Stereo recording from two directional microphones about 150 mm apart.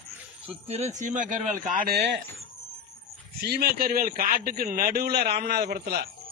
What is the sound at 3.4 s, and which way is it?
A man's voice, 85° right.